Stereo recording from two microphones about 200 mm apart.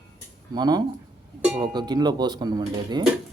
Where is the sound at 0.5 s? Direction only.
20° right (ahead or behind).